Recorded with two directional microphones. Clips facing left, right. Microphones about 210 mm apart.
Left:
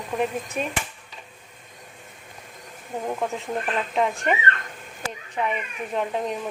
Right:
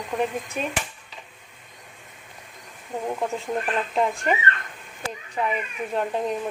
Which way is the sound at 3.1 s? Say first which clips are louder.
Right 1 dB; centre (ahead or behind).